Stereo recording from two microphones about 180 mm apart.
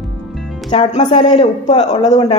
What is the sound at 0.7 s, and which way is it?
Speech, 35° left (ahead or behind).